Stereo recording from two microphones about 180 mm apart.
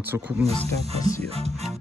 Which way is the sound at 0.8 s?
35° right (ahead or behind).